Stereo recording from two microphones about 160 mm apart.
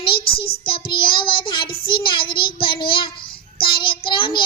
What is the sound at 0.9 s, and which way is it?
Child singing, 30° left (ahead or behind).